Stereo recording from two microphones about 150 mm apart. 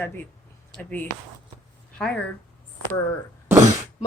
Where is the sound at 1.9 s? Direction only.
5° left (ahead or behind).